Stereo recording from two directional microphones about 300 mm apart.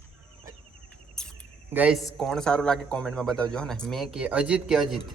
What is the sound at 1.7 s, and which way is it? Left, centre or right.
A man's voice, centre.